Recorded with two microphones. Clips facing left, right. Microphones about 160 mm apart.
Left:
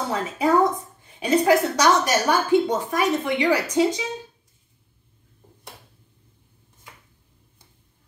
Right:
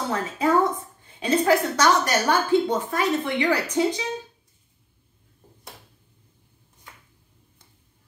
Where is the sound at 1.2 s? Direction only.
15° left (ahead or behind).